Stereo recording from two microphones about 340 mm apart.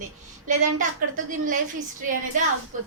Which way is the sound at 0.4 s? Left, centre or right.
Right.